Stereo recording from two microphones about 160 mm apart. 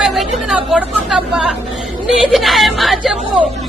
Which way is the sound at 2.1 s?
Centre (ahead or behind).